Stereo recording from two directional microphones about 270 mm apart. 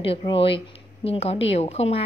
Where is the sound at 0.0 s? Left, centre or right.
Centre.